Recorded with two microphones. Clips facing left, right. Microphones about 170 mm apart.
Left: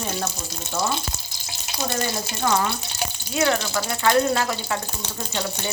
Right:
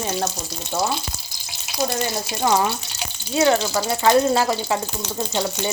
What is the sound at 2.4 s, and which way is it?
Speech, 25° right (ahead or behind).